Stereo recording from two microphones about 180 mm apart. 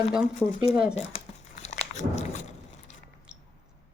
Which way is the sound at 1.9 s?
40° left (ahead or behind).